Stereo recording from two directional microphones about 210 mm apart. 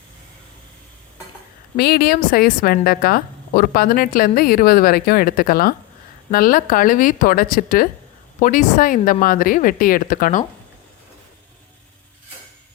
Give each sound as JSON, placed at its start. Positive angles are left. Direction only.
{"t": 1.7, "sound": "a woman's voice", "side_deg": 50}